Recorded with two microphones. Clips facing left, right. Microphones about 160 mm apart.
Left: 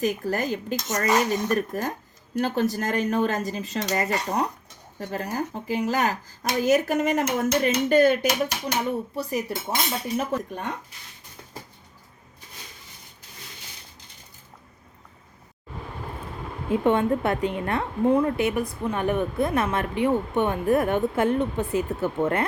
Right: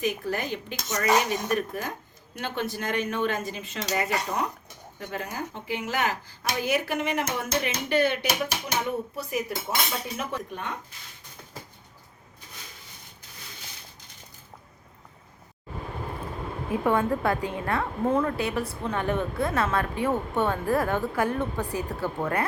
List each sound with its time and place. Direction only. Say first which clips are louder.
0.0 s speech: left 3 dB; 40° left (ahead or behind)
9.1 s speech: left 3 dB; 35° left (ahead or behind)
16.6 s a woman's voice: left 3 dB; 25° left (ahead or behind)